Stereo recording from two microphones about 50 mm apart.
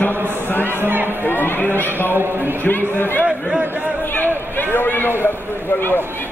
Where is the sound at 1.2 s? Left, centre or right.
Left.